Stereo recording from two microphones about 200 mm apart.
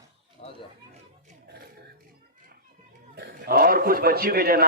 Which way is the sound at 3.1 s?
55° right (ahead or behind).